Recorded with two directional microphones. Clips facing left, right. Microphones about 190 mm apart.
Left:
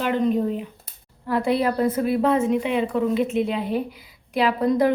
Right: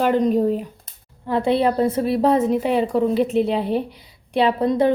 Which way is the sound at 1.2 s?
25° right (ahead or behind).